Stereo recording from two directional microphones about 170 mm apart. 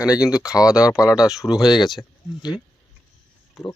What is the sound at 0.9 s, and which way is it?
Speech, 20° left (ahead or behind).